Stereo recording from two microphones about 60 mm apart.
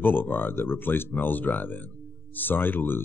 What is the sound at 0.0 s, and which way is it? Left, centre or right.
Speech, left.